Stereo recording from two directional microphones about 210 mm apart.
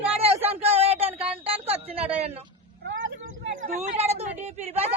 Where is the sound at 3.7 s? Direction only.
30° right (ahead or behind).